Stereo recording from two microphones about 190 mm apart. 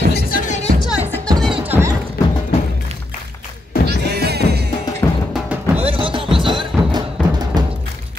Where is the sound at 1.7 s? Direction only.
15° right (ahead or behind).